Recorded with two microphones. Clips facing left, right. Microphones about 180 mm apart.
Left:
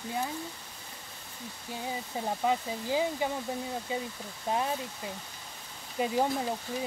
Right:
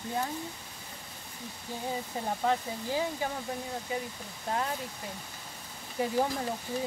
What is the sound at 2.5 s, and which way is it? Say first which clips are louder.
Speech: left 1 dB; 15° left (ahead or behind).